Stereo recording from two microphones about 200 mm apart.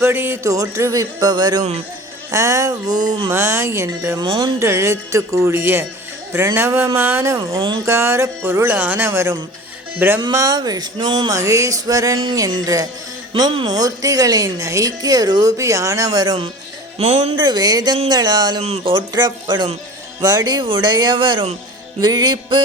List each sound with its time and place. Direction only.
0.0 s a woman's voice: 10° right (ahead or behind)
4.3 s speech: 25° right (ahead or behind)
4.6 s a woman's voice: 15° right (ahead or behind)
17.0 s speech: 30° right (ahead or behind)